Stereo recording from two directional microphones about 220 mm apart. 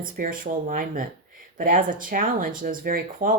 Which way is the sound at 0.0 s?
40° right (ahead or behind).